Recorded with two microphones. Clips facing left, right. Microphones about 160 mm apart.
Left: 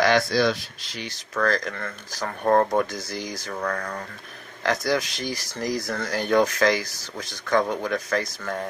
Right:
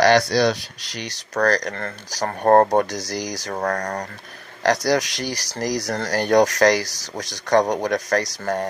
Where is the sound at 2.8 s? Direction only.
85° right.